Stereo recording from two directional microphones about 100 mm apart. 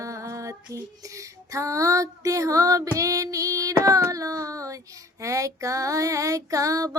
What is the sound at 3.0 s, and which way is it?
Child singing, 35° right (ahead or behind).